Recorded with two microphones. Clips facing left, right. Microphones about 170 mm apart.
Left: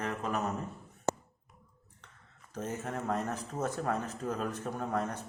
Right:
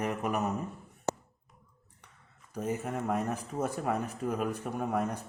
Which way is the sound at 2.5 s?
15° right (ahead or behind).